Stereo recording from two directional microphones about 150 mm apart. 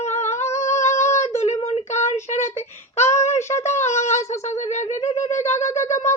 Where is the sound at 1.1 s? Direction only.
50° left (ahead or behind).